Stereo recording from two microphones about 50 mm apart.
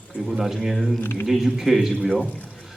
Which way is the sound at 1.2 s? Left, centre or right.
Centre.